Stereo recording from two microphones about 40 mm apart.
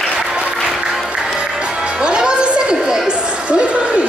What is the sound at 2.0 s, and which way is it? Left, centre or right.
Chatter, right.